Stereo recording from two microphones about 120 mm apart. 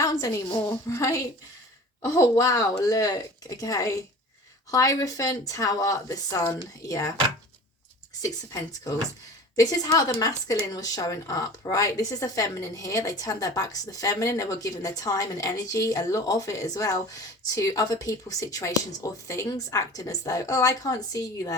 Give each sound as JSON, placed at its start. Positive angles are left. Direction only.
{"t": 0.0, "sound": "speech", "side_deg": 30}
{"t": 9.6, "sound": "speech", "side_deg": 30}